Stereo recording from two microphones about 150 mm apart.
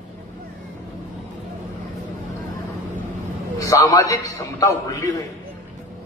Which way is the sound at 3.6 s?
20° left (ahead or behind).